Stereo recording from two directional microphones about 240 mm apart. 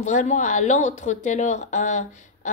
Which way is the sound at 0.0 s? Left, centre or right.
Left.